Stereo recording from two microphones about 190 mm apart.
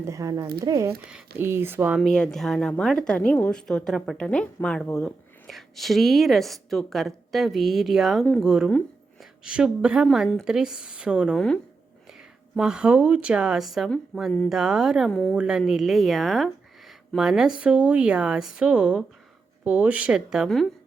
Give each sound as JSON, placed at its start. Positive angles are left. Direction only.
{"t": 0.0, "sound": "speech", "side_deg": -15}
{"t": 2.0, "sound": "a woman's voice", "side_deg": 5}